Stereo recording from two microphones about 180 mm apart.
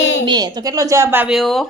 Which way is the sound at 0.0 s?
90° left.